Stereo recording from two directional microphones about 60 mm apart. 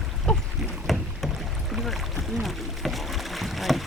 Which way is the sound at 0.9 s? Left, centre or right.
Centre.